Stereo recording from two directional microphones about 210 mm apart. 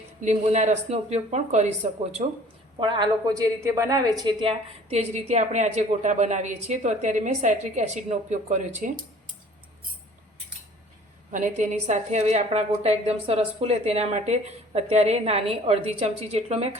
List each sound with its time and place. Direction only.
0.2 s a woman's voice: 35° right (ahead or behind)
11.3 s a woman's voice: 35° right (ahead or behind)